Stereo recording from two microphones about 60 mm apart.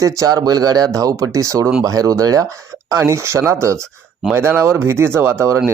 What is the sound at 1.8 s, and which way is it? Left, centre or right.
Speech, right.